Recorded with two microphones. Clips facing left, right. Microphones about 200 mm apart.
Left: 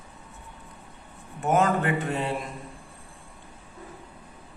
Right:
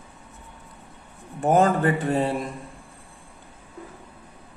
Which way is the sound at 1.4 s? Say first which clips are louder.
Right 4 dB; 35° right (ahead or behind).